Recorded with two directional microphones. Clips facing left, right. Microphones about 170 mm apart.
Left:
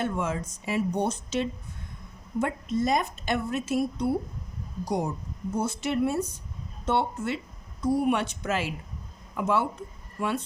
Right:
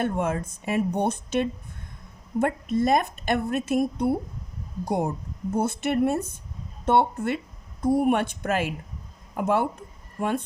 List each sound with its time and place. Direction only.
0.0 s a woman's voice: 55° right (ahead or behind)